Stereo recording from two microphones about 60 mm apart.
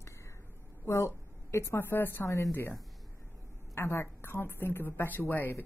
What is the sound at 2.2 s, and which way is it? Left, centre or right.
Speech, left.